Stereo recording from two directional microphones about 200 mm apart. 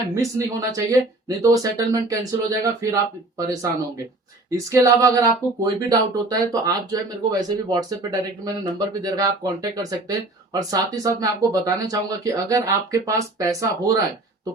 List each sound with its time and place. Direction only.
0.1 s speech: 15° right (ahead or behind)